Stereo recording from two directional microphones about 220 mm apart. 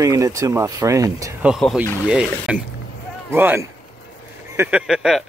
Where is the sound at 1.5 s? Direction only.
Centre (ahead or behind).